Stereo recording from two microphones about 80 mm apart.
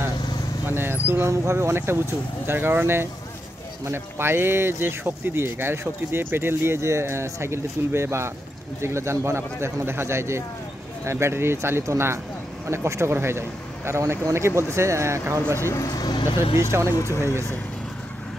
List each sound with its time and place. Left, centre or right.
0.7 s speech: right
15.6 s speech: left
16.9 s speech: left